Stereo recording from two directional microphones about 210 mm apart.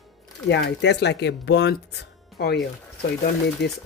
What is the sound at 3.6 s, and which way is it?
Speech, 50° left (ahead or behind).